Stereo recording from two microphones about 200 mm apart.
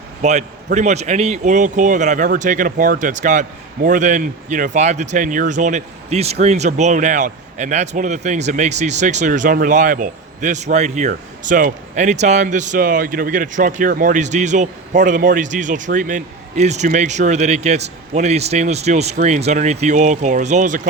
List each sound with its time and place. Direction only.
0.2 s speech: 35° right (ahead or behind)